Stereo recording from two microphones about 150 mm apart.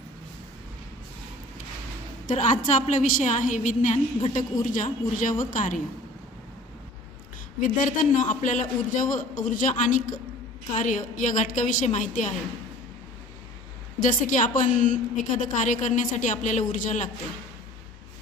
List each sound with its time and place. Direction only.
2.2 s a woman's voice: 60° left (ahead or behind)
7.6 s a woman's voice: 60° left (ahead or behind)
14.0 s a woman's voice: 60° left (ahead or behind)